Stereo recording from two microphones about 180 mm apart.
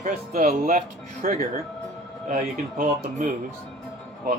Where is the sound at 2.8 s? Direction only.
50° right (ahead or behind).